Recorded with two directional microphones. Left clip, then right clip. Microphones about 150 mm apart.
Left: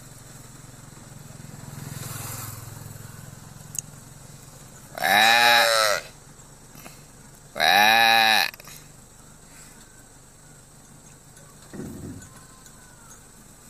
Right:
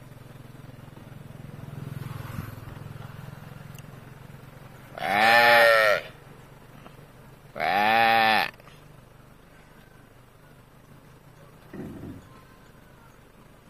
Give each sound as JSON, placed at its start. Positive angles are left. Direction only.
{"t": 5.0, "sound": "sheep", "side_deg": 10}
{"t": 5.7, "sound": "livestock", "side_deg": -5}
{"t": 7.5, "sound": "sheep", "side_deg": 10}